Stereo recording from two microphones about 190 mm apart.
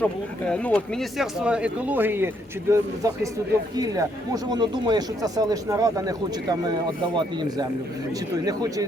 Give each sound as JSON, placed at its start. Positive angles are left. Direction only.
{"t": 0.0, "sound": "speech", "side_deg": 5}
{"t": 8.4, "sound": "speech", "side_deg": -20}